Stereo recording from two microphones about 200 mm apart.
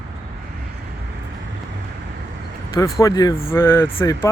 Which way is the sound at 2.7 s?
15° left (ahead or behind).